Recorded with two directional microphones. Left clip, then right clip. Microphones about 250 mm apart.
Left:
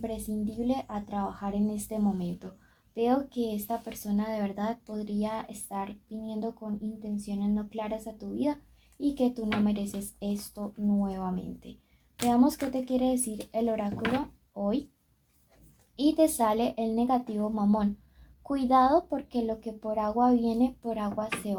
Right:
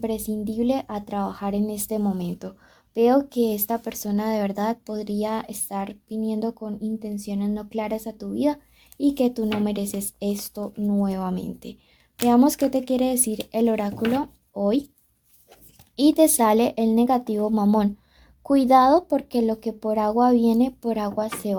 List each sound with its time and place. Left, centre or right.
0.0 s speech: right
16.0 s speech: right